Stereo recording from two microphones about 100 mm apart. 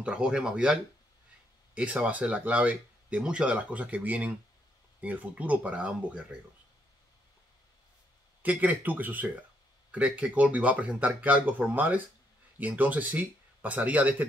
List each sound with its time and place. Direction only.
0.0 s speech: 10° right (ahead or behind)
1.8 s speech: 15° right (ahead or behind)
8.4 s speech: 15° right (ahead or behind)